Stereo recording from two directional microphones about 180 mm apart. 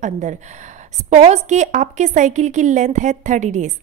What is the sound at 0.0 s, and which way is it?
A woman's voice, 40° right (ahead or behind).